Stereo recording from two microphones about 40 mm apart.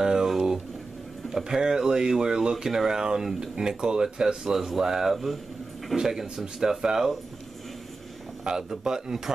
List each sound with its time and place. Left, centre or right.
0.0 s a sound: centre
1.3 s speech: centre
8.5 s speech: centre